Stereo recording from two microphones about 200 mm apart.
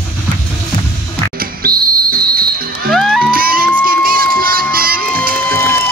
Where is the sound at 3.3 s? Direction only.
45° right (ahead or behind).